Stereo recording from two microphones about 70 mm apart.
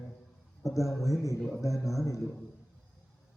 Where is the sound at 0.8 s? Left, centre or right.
Left.